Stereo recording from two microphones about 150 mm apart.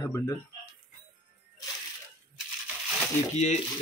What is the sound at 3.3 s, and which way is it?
Speech, 50° left (ahead or behind).